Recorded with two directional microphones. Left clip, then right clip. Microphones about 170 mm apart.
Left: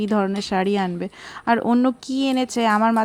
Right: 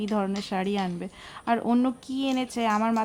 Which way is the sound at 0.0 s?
35° left (ahead or behind).